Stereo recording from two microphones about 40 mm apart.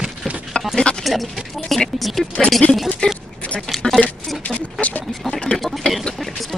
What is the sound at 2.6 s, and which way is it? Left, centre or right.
Speech, left.